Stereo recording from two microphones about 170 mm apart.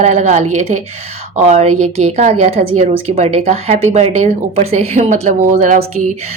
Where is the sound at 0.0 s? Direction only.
40° right (ahead or behind).